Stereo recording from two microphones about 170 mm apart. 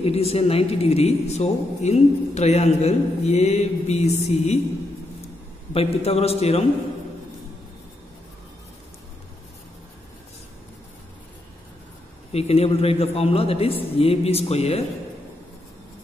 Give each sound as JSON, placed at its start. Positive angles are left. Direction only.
{"t": 0.0, "sound": "a man's voice", "side_deg": 35}
{"t": 5.7, "sound": "a man's voice", "side_deg": 35}
{"t": 12.3, "sound": "a man's voice", "side_deg": 40}